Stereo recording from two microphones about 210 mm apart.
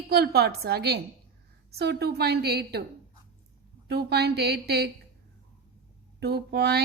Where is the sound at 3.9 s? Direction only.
50° right (ahead or behind).